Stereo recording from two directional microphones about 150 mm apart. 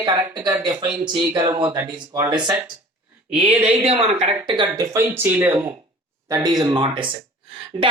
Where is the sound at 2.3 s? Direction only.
30° right (ahead or behind).